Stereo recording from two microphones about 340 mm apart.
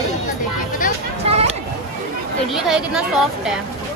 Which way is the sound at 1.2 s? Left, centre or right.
Centre.